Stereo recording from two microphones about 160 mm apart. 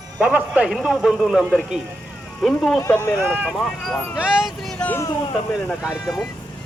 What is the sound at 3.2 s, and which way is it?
Speech, 10° right (ahead or behind).